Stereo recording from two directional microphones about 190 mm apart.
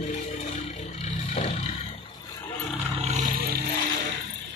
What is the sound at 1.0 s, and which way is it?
Vehicle, 35° left (ahead or behind).